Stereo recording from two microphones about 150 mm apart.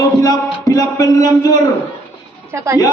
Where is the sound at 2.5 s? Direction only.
15° right (ahead or behind).